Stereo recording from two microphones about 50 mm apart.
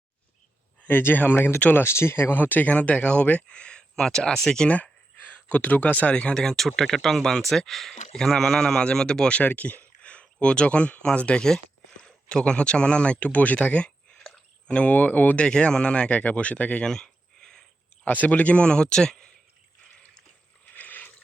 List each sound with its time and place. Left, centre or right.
0.8 s speech: left
1.8 s speech: left
2.4 s speech: left; by 4.7 s centre
5.3 s speech: left
6.3 s speech: centre
9.4 s a sound: left
10.7 s speech: left
11.4 s speech: centre; by 15.4 s left
15.4 s speech: left
16.8 s a sound: centre
18.0 s speech: left; by 19.3 s centre
20.7 s a sound: left